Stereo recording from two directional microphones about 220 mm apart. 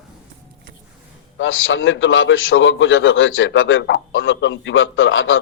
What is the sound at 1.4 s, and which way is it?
A man's voice, 65° left (ahead or behind).